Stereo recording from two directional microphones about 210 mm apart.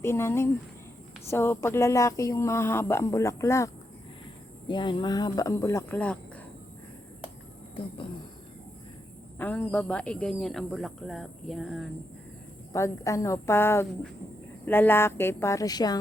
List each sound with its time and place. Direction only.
0.0 s speech: 10° left (ahead or behind)
4.7 s speech: 20° left (ahead or behind)
9.4 s speech: 5° left (ahead or behind)
12.7 s speech: 15° left (ahead or behind)